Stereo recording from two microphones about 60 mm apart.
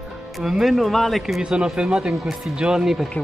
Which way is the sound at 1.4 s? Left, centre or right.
Centre.